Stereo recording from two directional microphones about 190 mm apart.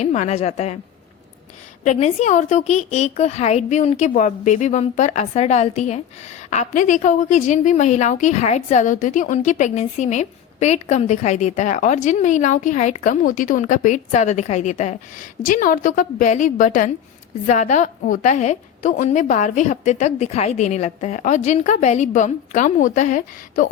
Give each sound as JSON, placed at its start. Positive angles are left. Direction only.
{"t": 0.0, "sound": "a woman's voice", "side_deg": 35}
{"t": 1.8, "sound": "a woman's voice", "side_deg": 35}